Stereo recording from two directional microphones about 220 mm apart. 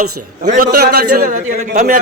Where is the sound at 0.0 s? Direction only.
35° right (ahead or behind).